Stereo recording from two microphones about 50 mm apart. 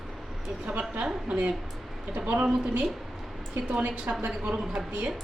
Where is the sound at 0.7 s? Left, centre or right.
Right.